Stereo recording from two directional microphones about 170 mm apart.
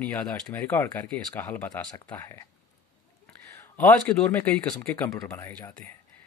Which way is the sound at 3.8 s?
10° left (ahead or behind).